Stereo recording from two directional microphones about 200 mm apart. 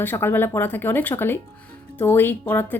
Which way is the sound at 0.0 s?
10° left (ahead or behind).